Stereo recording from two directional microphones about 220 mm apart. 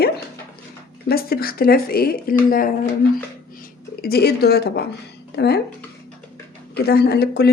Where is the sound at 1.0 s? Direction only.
45° left (ahead or behind).